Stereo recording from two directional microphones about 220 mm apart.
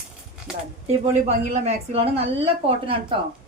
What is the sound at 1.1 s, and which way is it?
Speech, 30° right (ahead or behind).